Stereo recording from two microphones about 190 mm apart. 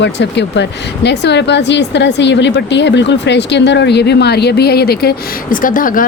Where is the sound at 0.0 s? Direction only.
70° left (ahead or behind).